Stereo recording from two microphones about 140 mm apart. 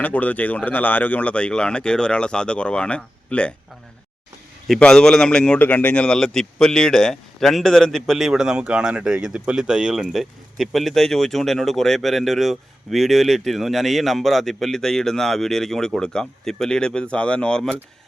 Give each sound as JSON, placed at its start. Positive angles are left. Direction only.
{"t": 0.0, "sound": "speech", "side_deg": 10}
{"t": 4.7, "sound": "a man's voice", "side_deg": 5}